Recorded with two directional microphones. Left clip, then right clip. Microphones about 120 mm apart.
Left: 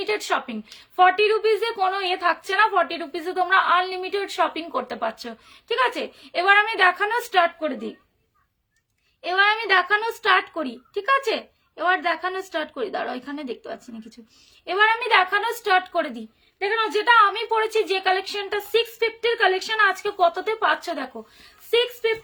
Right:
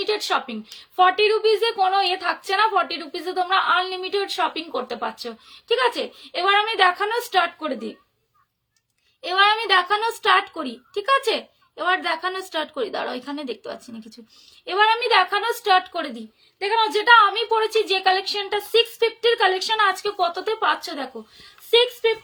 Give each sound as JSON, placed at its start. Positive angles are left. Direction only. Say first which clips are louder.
{"t": 0.0, "sound": "speech", "louder": "right 1 dB", "side_deg": 30}
{"t": 9.2, "sound": "speech", "louder": "right 2 dB", "side_deg": 15}
{"t": 14.6, "sound": "speech", "louder": "right 1 dB", "side_deg": 20}